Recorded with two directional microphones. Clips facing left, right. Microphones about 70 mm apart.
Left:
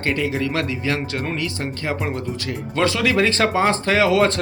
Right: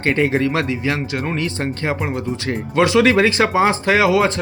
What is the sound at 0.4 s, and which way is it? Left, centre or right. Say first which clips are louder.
Speech: right 3 dB; right.